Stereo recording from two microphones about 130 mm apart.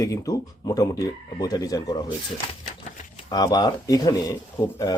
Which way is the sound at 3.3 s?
30° left (ahead or behind).